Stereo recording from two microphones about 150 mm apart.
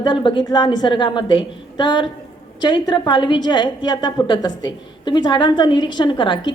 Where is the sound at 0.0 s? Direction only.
30° left (ahead or behind).